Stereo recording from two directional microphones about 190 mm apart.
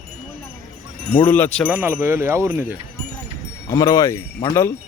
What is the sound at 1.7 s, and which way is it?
Speech, 10° right (ahead or behind).